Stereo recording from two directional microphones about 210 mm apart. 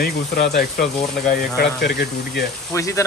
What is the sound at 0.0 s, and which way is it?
Speech, 50° left (ahead or behind).